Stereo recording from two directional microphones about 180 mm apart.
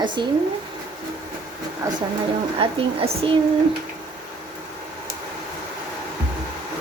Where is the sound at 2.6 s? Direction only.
30° right (ahead or behind).